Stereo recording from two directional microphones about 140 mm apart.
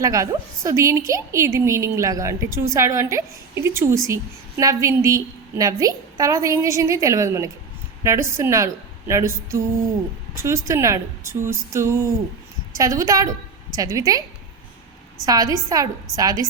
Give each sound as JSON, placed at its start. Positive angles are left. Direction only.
{"t": 0.0, "sound": "a woman's voice", "side_deg": -25}
{"t": 15.3, "sound": "a woman's voice", "side_deg": -25}